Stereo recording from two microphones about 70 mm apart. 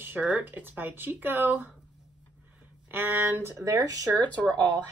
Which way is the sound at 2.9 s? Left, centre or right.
Right.